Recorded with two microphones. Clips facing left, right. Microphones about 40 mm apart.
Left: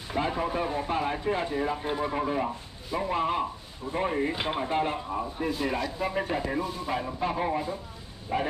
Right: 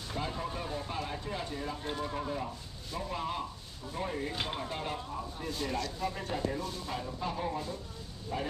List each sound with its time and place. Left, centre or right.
0.1 s speech: left
5.8 s speech: left
7.0 s speech: left